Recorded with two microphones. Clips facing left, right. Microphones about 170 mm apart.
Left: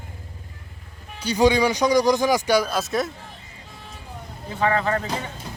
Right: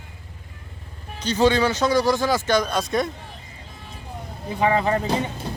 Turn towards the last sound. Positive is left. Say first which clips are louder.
# right 3 dB
turn(degrees=-20)  # may be behind; listen again after turning